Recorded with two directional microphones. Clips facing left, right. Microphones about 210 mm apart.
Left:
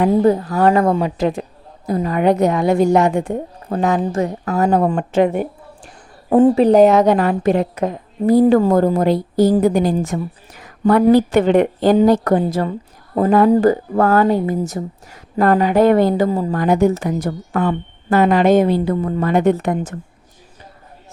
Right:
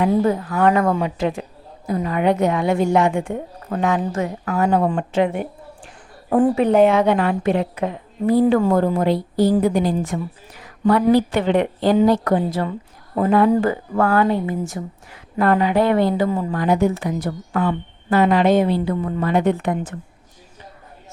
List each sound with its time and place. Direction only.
0.0 s a woman's voice: 35° left (ahead or behind)
6.3 s a woman's voice: 30° left (ahead or behind)